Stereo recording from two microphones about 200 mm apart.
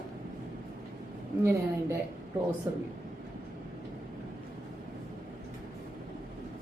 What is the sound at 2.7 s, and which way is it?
Speech, 15° right (ahead or behind).